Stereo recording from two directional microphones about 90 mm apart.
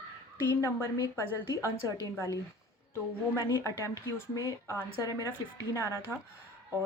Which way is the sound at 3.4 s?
35° left (ahead or behind).